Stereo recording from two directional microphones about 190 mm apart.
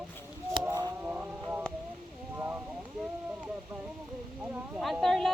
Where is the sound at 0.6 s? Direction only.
20° right (ahead or behind).